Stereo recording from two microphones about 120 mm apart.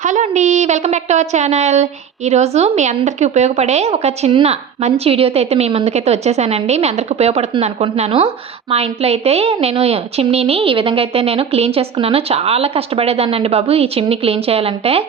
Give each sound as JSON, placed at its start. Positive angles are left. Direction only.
{"t": 0.0, "sound": "a woman's voice", "side_deg": -85}